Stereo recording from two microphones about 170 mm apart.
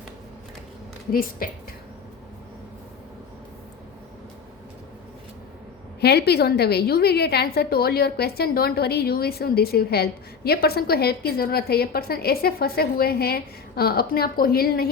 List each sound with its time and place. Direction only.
1.1 s a woman's voice: 55° left (ahead or behind)
6.0 s a woman's voice: 70° left (ahead or behind)